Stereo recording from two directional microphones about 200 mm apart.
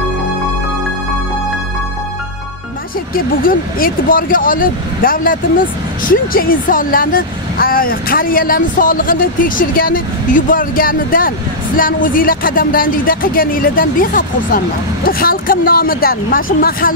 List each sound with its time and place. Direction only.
3.4 s speech: 45° left (ahead or behind)